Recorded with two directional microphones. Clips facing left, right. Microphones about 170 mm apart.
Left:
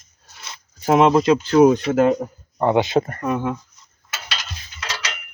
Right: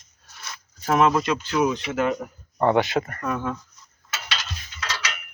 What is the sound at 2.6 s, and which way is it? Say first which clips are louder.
Speech: left 3 dB; 15° left (ahead or behind).